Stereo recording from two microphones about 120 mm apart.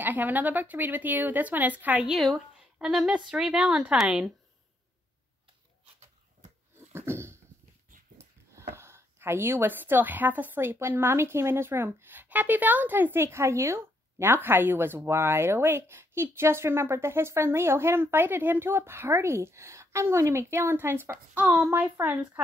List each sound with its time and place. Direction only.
0.0 s speech: 15° right (ahead or behind)
2.1 s speech: centre (ahead or behind)
6.9 s dog: 20° right (ahead or behind)
8.2 s speech: 20° right (ahead or behind)